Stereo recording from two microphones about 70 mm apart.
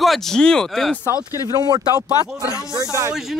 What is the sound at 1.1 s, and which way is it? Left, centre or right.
Speech, left.